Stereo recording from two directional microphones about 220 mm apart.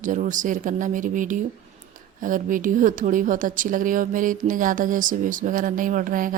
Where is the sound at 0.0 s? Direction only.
35° right (ahead or behind).